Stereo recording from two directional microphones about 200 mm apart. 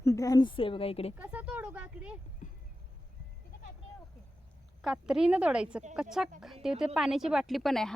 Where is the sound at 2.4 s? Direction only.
40° left (ahead or behind).